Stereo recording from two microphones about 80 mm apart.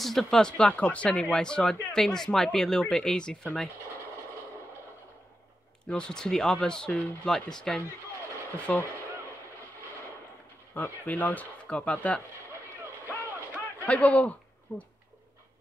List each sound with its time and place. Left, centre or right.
0.0 s speech: centre
5.9 s speech: centre
8.5 s speech: centre
10.7 s speech: left
13.8 s speech: centre